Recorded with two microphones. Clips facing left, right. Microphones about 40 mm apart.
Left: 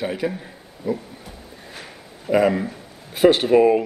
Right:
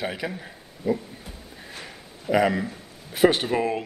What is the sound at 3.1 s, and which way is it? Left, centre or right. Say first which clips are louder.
Speech: left 4 dB; left.